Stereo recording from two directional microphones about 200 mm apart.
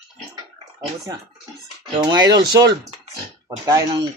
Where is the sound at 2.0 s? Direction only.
20° right (ahead or behind).